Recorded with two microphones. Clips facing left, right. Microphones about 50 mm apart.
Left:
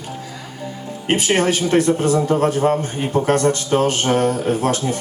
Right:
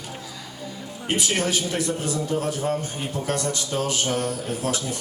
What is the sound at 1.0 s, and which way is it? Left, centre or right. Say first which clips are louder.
A man's voice: left 7 dB; left.